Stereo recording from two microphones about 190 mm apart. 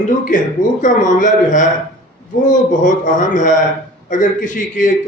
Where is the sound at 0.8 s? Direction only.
40° left (ahead or behind).